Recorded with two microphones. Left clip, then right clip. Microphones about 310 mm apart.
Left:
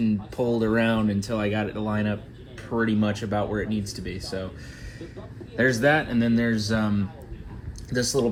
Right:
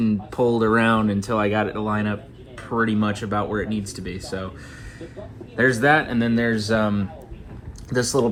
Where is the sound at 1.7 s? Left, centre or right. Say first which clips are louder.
Right 5 dB; right.